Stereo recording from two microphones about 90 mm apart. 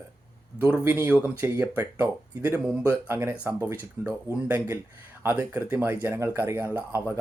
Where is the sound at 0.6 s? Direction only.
15° right (ahead or behind).